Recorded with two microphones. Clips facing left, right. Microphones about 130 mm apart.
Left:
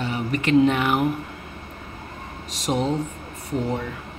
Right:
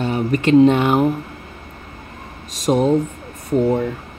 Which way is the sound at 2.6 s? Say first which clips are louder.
Right 7 dB; 50° right (ahead or behind).